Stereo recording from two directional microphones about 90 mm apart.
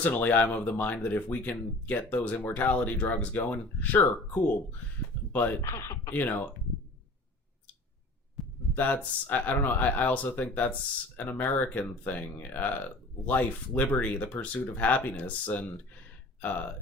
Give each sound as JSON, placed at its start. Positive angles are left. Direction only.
{"t": 0.0, "sound": "speech", "side_deg": 20}
{"t": 5.6, "sound": "speech", "side_deg": 35}
{"t": 6.1, "sound": "speech", "side_deg": 20}
{"t": 8.4, "sound": "heart sounds", "side_deg": 0}
{"t": 8.7, "sound": "speech", "side_deg": 20}